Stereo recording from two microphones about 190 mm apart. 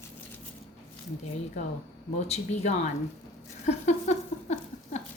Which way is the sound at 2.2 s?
35° left (ahead or behind).